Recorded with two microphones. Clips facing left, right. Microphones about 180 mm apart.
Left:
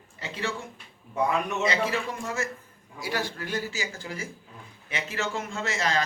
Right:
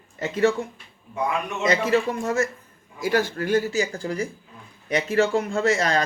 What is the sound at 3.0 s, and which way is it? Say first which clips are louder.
A man's voice: right 9 dB; 45° right (ahead or behind).